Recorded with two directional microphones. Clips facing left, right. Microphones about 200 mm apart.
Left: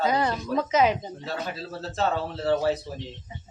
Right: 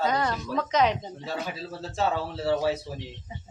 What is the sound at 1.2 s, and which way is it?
Speech, 10° right (ahead or behind).